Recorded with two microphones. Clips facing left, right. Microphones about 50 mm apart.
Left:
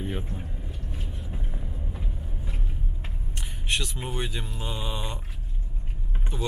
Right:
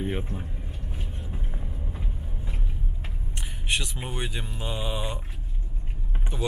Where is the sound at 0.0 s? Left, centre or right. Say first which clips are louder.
Right 3 dB; centre.